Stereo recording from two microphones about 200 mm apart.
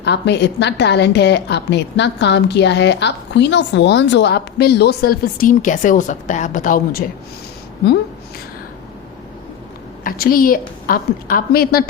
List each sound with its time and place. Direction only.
0.0 s a woman's voice: 60° left (ahead or behind); by 7.0 s 45° left (ahead or behind)
10.0 s a woman's voice: 45° left (ahead or behind)